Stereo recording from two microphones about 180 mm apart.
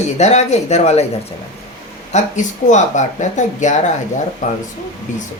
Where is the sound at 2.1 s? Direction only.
40° left (ahead or behind).